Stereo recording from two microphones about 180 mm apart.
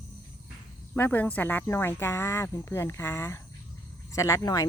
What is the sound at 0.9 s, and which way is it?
Speech, 10° left (ahead or behind).